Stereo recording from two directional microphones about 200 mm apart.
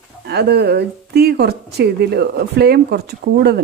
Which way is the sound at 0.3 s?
55° right (ahead or behind).